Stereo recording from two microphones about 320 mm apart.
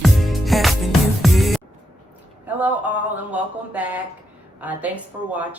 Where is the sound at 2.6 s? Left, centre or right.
Centre.